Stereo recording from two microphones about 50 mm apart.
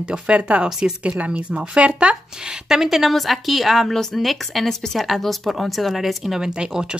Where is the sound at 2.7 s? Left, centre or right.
Centre.